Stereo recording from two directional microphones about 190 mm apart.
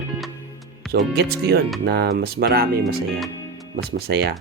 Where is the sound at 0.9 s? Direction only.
55° right (ahead or behind).